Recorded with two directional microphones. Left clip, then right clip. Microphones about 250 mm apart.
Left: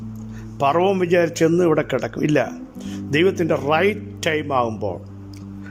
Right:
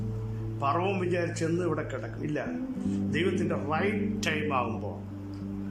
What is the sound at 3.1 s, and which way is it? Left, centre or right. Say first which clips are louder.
A man's voice: left 13 dB; left.